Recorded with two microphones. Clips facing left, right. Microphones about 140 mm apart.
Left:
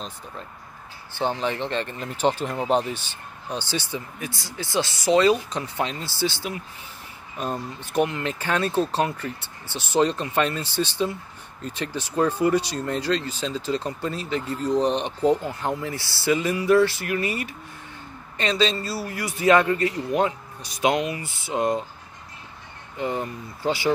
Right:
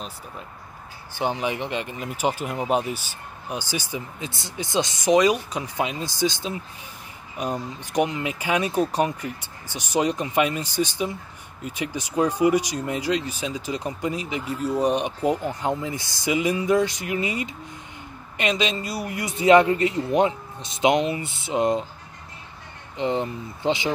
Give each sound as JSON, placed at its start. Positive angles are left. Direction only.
{"t": 1.1, "sound": "speech", "side_deg": -15}
{"t": 22.9, "sound": "speech", "side_deg": -20}